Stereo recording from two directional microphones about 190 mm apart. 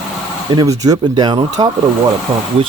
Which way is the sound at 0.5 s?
15° right (ahead or behind).